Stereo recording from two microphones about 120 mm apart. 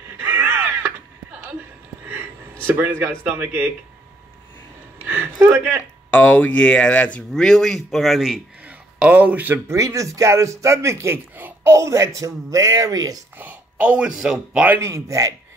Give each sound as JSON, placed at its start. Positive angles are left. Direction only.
{"t": 0.2, "sound": "a sound", "side_deg": -15}
{"t": 2.6, "sound": "speech", "side_deg": -20}
{"t": 5.0, "sound": "a sound", "side_deg": -15}
{"t": 6.0, "sound": "speech", "side_deg": 15}
{"t": 8.6, "sound": "speech", "side_deg": -15}
{"t": 9.8, "sound": "a man's voice", "side_deg": -25}
{"t": 13.4, "sound": "speech", "side_deg": -15}
{"t": 14.8, "sound": "a man's voice", "side_deg": -25}